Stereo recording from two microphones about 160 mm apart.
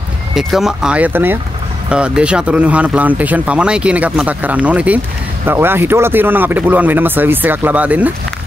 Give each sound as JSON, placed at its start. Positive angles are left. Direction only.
{"t": 0.3, "sound": "speech", "side_deg": 0}